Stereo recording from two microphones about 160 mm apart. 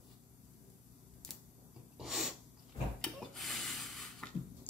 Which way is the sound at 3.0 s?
Centre (ahead or behind).